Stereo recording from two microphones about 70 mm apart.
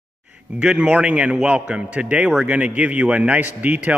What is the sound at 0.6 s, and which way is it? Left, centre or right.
A man's voice, centre.